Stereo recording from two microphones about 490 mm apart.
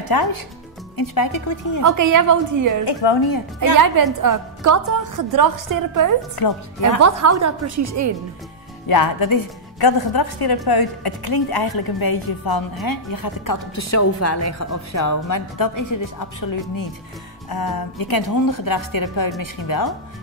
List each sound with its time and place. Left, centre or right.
0.1 s a woman's voice: left
1.8 s a woman's voice: right
2.8 s a woman's voice: left
3.3 s a woman's voice: left
3.8 s a woman's voice: right
6.3 s a woman's voice: left
7.0 s a woman's voice: right
8.8 s a woman's voice: left